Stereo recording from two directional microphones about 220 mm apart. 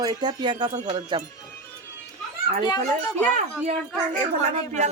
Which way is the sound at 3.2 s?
Centre (ahead or behind).